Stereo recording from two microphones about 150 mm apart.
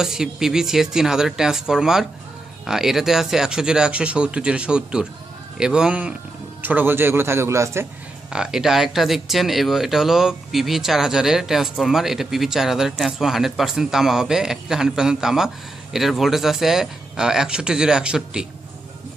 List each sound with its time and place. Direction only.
0.0 s a man's voice: 5° right (ahead or behind)
8.3 s speech: 5° right (ahead or behind)